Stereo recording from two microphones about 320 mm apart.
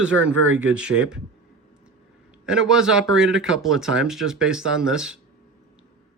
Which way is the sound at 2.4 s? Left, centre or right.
Centre.